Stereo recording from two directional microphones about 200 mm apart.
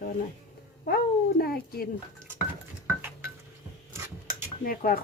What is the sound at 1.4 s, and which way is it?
Speech, 50° left (ahead or behind).